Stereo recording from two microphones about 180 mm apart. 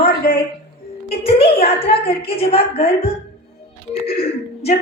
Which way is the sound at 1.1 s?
35° left (ahead or behind).